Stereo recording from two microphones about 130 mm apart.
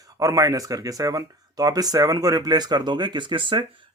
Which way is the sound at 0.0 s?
25° right (ahead or behind).